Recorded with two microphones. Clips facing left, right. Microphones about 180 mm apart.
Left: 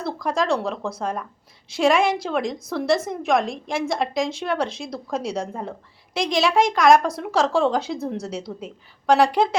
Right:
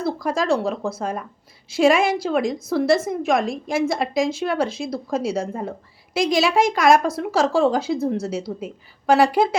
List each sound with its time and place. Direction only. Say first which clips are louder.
0.0 s a woman's voice: right 1 dB; 5° right (ahead or behind)